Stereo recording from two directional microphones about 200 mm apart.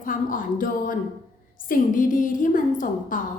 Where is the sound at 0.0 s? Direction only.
40° left (ahead or behind).